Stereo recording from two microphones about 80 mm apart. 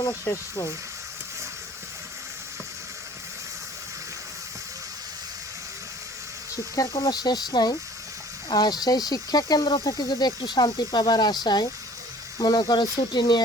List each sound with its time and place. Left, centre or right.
0.0 s speech: left
6.7 s speech: left